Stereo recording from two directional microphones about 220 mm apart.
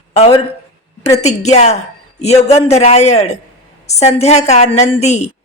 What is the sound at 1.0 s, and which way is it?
A woman's voice, 30° left (ahead or behind).